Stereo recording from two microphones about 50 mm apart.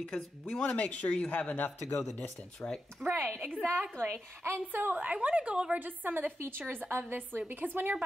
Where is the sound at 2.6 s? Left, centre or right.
Left.